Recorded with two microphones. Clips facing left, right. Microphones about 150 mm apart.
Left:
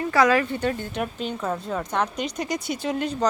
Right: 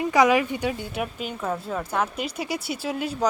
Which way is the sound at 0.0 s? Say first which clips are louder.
Right 1 dB; 15° right (ahead or behind).